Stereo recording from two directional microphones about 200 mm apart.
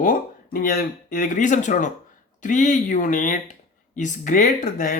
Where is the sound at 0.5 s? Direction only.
45° left (ahead or behind).